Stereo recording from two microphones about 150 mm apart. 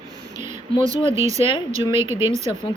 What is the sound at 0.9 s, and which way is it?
Speech, 35° left (ahead or behind).